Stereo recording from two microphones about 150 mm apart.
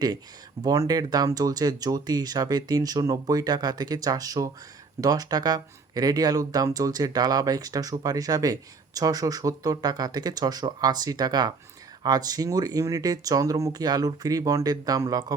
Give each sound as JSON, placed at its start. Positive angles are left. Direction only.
{"t": 0.6, "sound": "speech", "side_deg": -25}